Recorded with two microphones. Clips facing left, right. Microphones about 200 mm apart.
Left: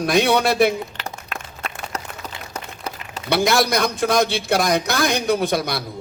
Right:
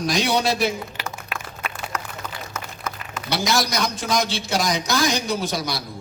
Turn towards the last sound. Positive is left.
turn(degrees=55)  # may be behind; listen again after turning